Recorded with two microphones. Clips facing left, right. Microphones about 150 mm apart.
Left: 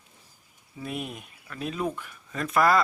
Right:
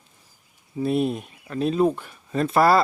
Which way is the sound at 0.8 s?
35° right (ahead or behind).